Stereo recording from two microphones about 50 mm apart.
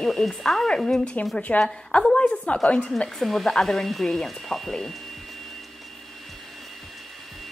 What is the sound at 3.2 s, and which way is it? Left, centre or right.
Speech, centre.